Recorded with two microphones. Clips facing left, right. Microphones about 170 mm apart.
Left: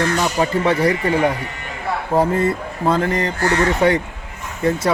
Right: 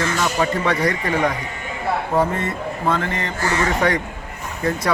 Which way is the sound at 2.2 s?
35° left (ahead or behind).